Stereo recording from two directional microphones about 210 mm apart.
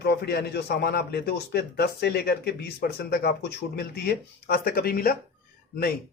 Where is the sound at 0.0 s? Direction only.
50° left (ahead or behind).